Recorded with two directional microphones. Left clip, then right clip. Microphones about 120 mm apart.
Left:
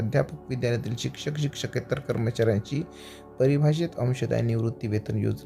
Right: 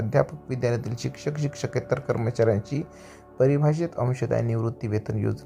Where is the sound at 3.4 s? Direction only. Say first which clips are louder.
Right 2 dB; 45° left (ahead or behind).